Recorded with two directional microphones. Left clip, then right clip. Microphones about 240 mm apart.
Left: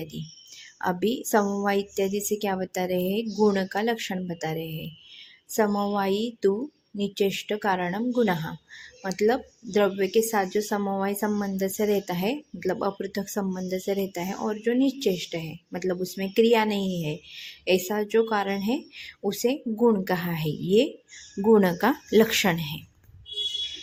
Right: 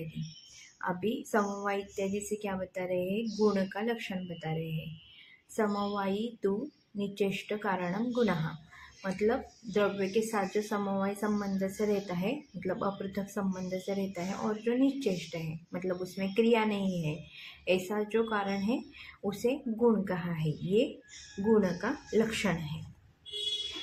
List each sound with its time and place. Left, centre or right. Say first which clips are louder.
0.8 s speech: left 7 dB; left
5.5 s speech: left 7 dB; left